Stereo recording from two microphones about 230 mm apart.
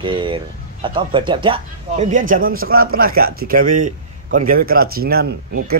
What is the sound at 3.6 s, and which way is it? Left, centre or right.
Speech, right.